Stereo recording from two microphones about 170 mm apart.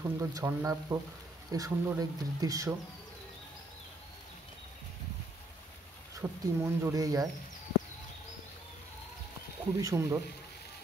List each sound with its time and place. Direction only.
0.0 s speech: 20° right (ahead or behind)
6.1 s speech: 20° right (ahead or behind)
9.8 s speech: 20° right (ahead or behind)